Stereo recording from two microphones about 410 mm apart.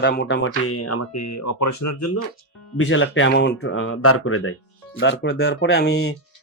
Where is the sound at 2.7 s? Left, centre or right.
Left.